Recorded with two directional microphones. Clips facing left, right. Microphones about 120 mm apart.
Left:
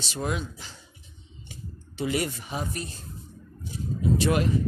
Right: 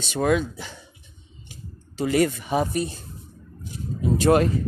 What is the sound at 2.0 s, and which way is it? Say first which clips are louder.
Speech: right 7 dB; 45° right (ahead or behind).